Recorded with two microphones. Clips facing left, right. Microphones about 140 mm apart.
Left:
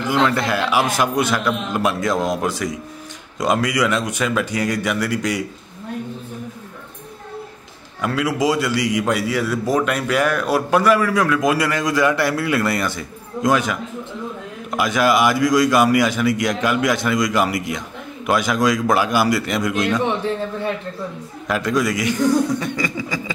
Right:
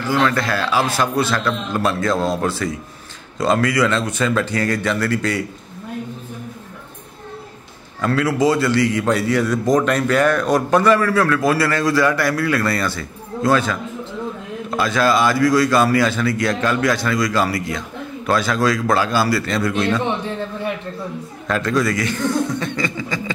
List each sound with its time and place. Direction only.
0.0 s a man's voice: 20° left (ahead or behind)
8.0 s a man's voice: 10° left (ahead or behind)
21.5 s a man's voice: 15° left (ahead or behind)